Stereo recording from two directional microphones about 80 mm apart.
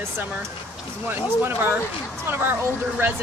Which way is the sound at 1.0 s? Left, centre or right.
Right.